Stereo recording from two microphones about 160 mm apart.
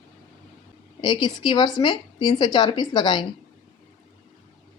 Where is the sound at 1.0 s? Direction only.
30° left (ahead or behind).